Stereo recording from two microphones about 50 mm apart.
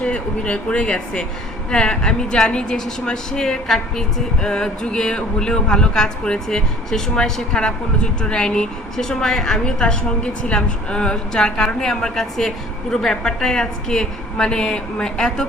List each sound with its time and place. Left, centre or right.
0.0 s speech: left